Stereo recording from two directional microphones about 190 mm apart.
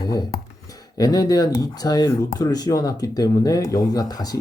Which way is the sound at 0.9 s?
20° left (ahead or behind).